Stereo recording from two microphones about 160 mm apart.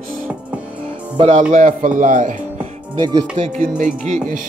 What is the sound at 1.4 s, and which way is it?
Speech, 55° right (ahead or behind).